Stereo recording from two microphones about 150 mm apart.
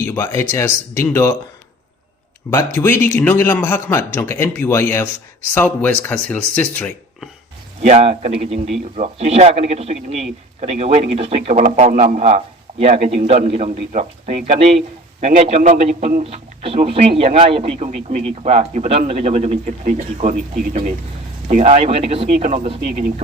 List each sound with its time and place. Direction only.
0.0 s speech: 15° left (ahead or behind)
2.5 s speech: 20° left (ahead or behind)
7.8 s speech: 45° right (ahead or behind)
11.5 s speech: 55° right (ahead or behind)
21.4 s speech: 45° right (ahead or behind)